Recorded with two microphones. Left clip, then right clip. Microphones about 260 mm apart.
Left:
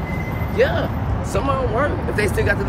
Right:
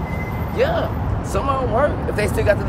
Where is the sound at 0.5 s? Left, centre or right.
Centre.